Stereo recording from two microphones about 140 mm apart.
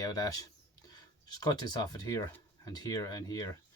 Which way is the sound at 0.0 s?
25° left (ahead or behind).